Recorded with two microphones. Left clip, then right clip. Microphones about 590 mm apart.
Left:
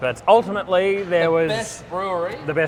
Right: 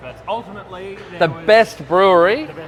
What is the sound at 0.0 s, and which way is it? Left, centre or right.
Speech, left.